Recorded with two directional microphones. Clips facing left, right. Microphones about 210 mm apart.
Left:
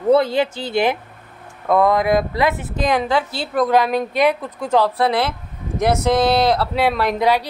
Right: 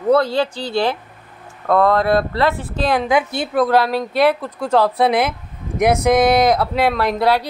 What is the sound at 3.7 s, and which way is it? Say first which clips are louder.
Speech: even; 15° left (ahead or behind).